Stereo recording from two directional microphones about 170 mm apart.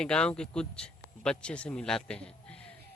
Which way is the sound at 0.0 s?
5° left (ahead or behind).